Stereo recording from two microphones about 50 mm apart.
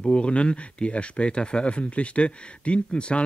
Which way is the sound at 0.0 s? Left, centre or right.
Centre.